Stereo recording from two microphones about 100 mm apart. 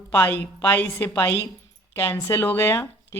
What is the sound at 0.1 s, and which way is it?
Speech, 20° left (ahead or behind).